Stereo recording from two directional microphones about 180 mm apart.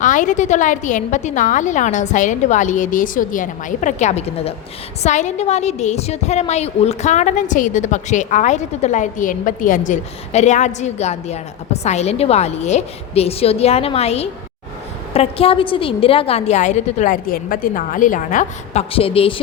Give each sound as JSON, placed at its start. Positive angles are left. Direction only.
{"t": 0.0, "sound": "a woman's voice", "side_deg": 45}